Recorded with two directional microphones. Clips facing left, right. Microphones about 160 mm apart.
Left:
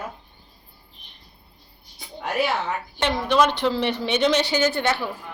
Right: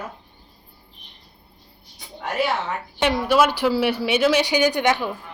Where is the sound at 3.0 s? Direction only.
10° right (ahead or behind).